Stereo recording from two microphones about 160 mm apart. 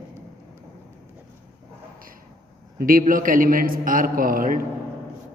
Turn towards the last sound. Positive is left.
turn(degrees=-60)  # may be behind; listen again after turning